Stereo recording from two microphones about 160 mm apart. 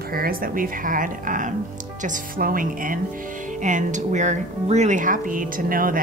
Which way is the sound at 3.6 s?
50° right (ahead or behind).